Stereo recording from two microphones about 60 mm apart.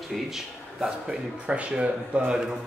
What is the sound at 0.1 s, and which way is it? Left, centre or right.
Speech, centre.